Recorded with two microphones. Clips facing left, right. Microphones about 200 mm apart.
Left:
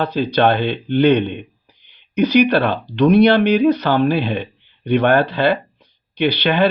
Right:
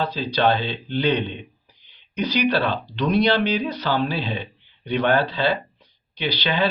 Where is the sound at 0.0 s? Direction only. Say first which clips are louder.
Left 5 dB; 55° left (ahead or behind).